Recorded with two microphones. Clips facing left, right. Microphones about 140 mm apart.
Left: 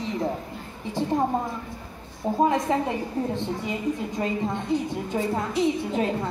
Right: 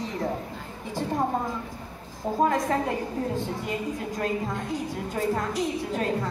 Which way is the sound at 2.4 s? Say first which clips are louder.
Left 1 dB; 20° left (ahead or behind).